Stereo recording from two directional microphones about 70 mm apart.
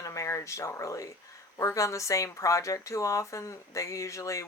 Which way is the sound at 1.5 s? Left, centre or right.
Left.